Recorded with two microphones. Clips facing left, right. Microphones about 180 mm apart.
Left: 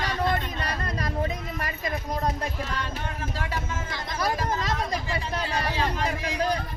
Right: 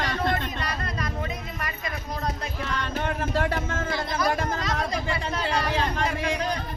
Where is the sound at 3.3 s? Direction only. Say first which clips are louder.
Right 6 dB; 55° right (ahead or behind).